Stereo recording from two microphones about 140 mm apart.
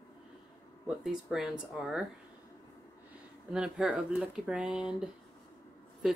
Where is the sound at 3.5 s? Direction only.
5° right (ahead or behind).